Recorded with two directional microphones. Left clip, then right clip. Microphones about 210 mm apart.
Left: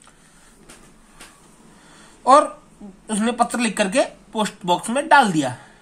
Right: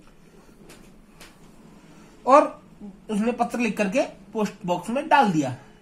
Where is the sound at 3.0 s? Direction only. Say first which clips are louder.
Left 4 dB; 20° left (ahead or behind).